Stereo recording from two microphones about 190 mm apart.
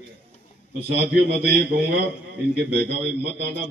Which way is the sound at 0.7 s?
60° right (ahead or behind).